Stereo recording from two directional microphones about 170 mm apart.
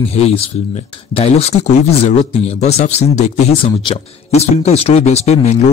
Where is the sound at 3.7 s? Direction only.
30° left (ahead or behind).